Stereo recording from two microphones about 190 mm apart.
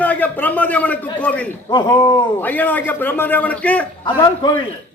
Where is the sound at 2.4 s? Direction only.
10° left (ahead or behind).